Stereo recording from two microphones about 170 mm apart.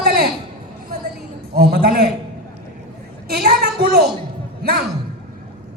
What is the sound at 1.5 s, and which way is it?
Speech, 65° right (ahead or behind).